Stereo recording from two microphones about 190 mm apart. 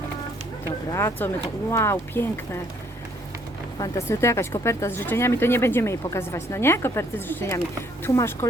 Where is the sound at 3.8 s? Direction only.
15° left (ahead or behind).